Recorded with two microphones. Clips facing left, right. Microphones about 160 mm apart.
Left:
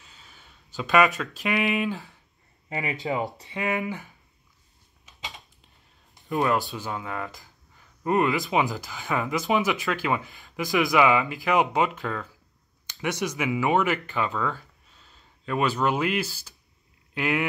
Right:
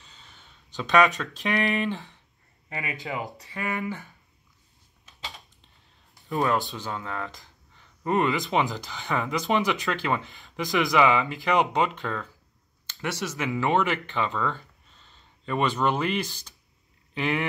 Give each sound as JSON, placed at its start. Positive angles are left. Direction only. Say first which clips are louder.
{"t": 0.0, "sound": "speech", "louder": "even", "side_deg": 5}
{"t": 2.7, "sound": "speech", "louder": "left 5 dB", "side_deg": 25}
{"t": 6.2, "sound": "speech", "louder": "left 1 dB", "side_deg": 0}
{"t": 12.8, "sound": "speech", "louder": "left 3 dB", "side_deg": 15}